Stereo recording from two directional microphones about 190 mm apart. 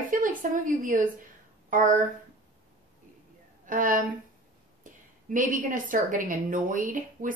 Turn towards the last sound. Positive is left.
turn(degrees=-45)  # may be behind; listen again after turning